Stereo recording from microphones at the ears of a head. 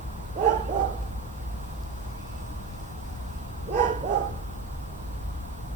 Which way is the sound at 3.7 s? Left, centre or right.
Right.